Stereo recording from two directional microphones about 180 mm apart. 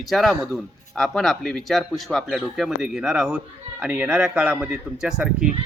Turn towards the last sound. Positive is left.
turn(degrees=-5)  # may be behind; listen again after turning